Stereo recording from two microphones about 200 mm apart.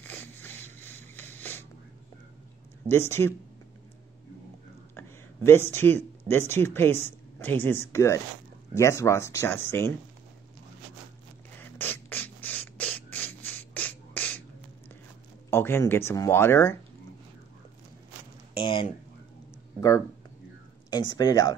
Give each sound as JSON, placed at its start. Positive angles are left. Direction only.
{"t": 0.0, "sound": "zipper", "side_deg": 10}
{"t": 2.9, "sound": "speech", "side_deg": 10}
{"t": 4.9, "sound": "speech", "side_deg": 10}
{"t": 11.6, "sound": "rodents", "side_deg": 10}
{"t": 15.5, "sound": "speech", "side_deg": 10}
{"t": 18.6, "sound": "speech", "side_deg": 25}
{"t": 21.1, "sound": "speech", "side_deg": 20}